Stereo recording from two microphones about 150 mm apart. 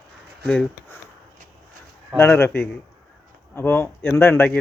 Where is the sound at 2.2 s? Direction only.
15° left (ahead or behind).